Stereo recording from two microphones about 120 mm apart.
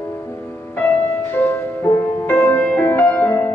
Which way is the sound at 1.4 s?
15° left (ahead or behind).